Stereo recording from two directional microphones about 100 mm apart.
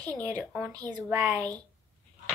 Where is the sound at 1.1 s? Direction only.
20° right (ahead or behind).